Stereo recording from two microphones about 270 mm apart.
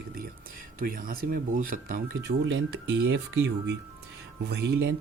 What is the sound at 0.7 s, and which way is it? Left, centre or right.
Speech, right.